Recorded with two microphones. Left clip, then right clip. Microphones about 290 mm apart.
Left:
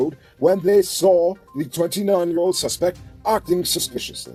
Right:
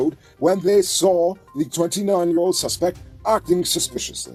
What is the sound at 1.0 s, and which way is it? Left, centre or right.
Speech, right.